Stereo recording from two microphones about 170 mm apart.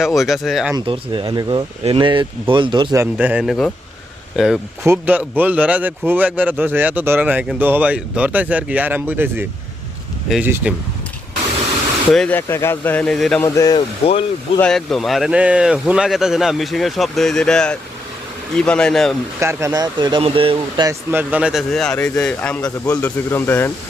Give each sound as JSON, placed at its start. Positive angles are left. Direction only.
{"t": 0.0, "sound": "speech", "side_deg": 0}
{"t": 0.9, "sound": "speech", "side_deg": -30}
{"t": 2.9, "sound": "speech", "side_deg": -15}
{"t": 12.1, "sound": "speech", "side_deg": 5}
{"t": 13.4, "sound": "speech", "side_deg": 20}
{"t": 14.0, "sound": "speech", "side_deg": 35}
{"t": 14.6, "sound": "speech", "side_deg": 0}
{"t": 19.4, "sound": "speech", "side_deg": -15}
{"t": 20.8, "sound": "speech", "side_deg": -10}